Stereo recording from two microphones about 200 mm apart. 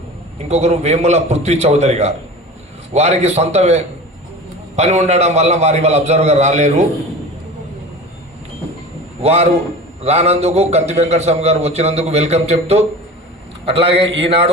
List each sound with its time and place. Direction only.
0.3 s a man's voice: 35° right (ahead or behind)
9.2 s a man's voice: 30° right (ahead or behind)